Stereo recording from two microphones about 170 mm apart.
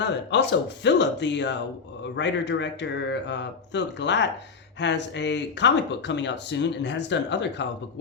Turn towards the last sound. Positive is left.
turn(degrees=90)